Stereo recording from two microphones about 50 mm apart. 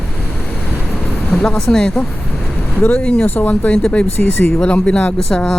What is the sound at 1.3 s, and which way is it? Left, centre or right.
Speech, left.